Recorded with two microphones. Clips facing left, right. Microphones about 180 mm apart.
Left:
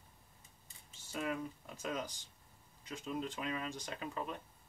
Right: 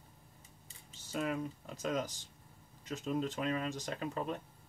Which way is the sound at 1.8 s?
40° right (ahead or behind).